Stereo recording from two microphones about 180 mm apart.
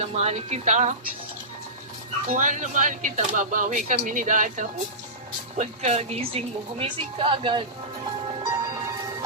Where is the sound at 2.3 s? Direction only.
45° right (ahead or behind); by 7.6 s 30° right (ahead or behind).